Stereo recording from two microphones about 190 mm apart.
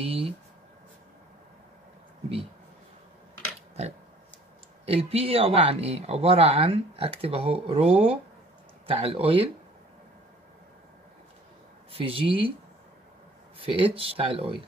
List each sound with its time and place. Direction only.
0.0 s writing: 30° right (ahead or behind)
4.8 s speech: 30° right (ahead or behind)
11.9 s speech: 30° right (ahead or behind)
13.6 s speech: 30° right (ahead or behind)